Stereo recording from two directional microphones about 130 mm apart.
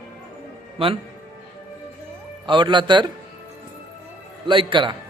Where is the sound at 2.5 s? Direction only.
35° right (ahead or behind).